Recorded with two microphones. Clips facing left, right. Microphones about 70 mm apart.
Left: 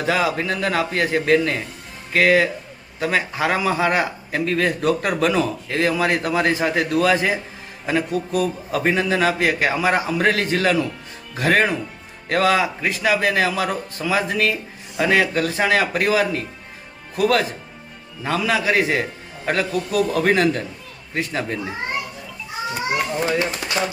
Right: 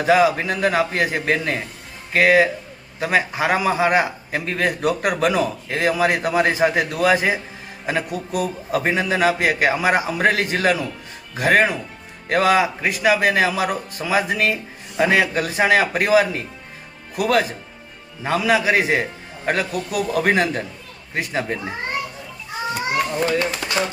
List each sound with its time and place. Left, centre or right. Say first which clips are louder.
0.0 s a man's voice: right 4 dB; centre
23.0 s a child's voice: right 1 dB; centre